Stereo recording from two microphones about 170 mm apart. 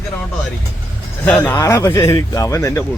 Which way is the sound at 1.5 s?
15° left (ahead or behind).